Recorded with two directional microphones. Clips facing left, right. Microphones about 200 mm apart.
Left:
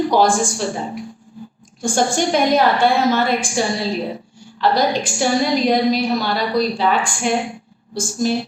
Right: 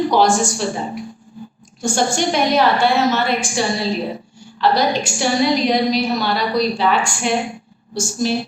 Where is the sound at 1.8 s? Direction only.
50° left (ahead or behind).